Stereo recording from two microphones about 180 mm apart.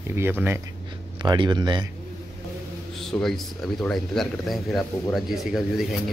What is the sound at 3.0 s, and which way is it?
A man's voice, centre (ahead or behind).